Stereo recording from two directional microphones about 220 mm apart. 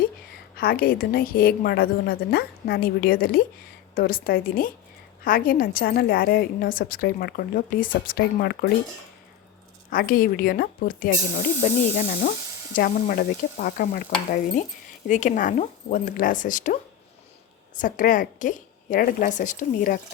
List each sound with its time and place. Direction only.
0.5 s a woman's voice: 45° left (ahead or behind)
9.9 s a woman's voice: 40° left (ahead or behind)
17.7 s a woman's voice: 35° left (ahead or behind)